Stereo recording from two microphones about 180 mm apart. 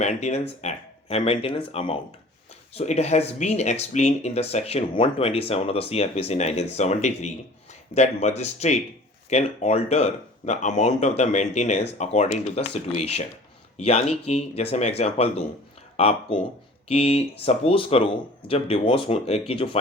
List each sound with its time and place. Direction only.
0.0 s speech: 40° left (ahead or behind)